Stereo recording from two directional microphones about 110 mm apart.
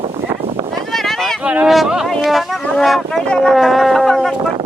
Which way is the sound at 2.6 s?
5° left (ahead or behind).